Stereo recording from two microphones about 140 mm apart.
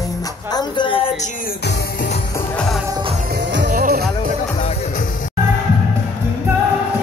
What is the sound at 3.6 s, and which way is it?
Music, 90° right.